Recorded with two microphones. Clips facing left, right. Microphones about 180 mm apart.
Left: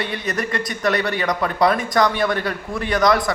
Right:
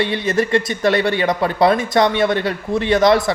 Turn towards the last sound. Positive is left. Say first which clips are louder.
# right 4 dB
turn(degrees=-25)  # may be behind; listen again after turning